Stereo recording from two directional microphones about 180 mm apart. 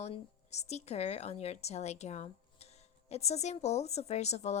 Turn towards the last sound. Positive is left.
turn(degrees=40)  # may be behind; listen again after turning